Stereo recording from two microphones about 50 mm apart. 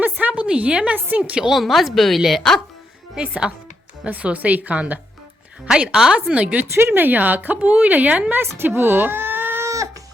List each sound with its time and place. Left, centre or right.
0.0 s a sound: right
0.4 s speech: right
1.5 s a woman's voice: centre
3.2 s speech: centre
5.6 s a woman's voice: centre
6.3 s speech: right
6.9 s a woman's voice: right
8.4 s speech: right
9.6 s crying: right